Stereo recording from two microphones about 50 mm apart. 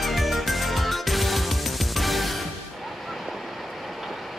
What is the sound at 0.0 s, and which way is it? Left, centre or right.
Music, centre.